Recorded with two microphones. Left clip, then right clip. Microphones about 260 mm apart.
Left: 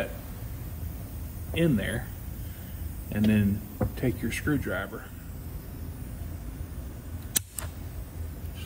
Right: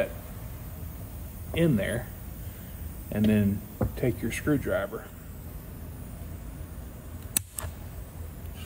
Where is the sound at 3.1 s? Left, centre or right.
Right.